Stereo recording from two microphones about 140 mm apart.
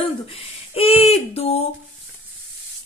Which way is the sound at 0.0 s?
40° left (ahead or behind).